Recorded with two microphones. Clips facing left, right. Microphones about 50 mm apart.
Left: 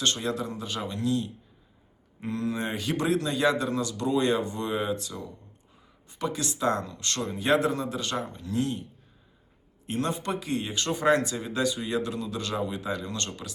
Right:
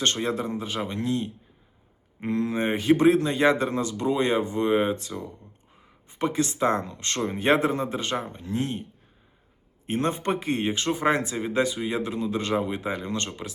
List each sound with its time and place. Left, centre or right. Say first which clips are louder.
0.0 s a man's voice: right 3 dB; right
9.8 s a man's voice: right 4 dB; right
10.8 s a man's voice: left 4 dB; right